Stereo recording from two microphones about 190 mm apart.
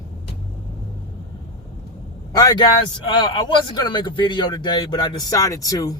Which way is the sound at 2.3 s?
20° left (ahead or behind).